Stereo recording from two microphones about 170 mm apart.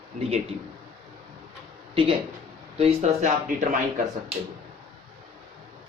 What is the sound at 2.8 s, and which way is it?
Speech, 40° right (ahead or behind).